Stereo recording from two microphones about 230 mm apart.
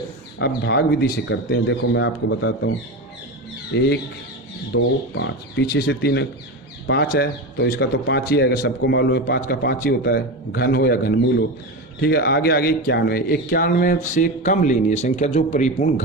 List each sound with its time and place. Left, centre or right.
0.3 s a man's voice: left